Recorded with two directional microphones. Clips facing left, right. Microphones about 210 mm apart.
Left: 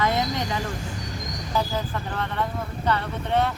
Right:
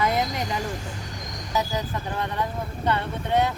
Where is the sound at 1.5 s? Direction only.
15° right (ahead or behind).